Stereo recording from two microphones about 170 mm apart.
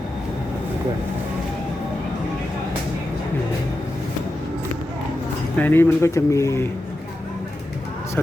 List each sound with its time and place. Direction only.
5.5 s speech: 10° left (ahead or behind)